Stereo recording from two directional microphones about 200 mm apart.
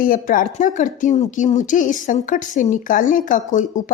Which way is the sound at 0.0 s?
45° left (ahead or behind).